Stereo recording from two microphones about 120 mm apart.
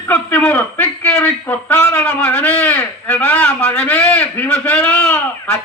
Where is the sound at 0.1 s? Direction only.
15° left (ahead or behind).